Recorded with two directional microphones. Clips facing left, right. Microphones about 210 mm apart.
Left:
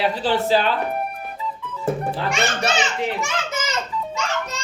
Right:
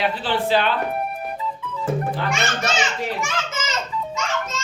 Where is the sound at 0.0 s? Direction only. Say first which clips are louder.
Left 2 dB; 40° left (ahead or behind).